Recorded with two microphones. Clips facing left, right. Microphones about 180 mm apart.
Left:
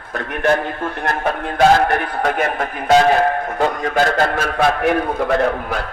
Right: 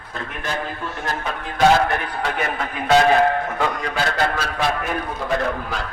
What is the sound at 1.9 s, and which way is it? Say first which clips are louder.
A man's voice: left 5 dB; 55° left (ahead or behind).